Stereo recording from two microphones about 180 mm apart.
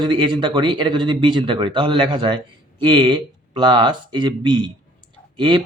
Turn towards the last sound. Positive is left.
turn(degrees=-25)  # may be behind; listen again after turning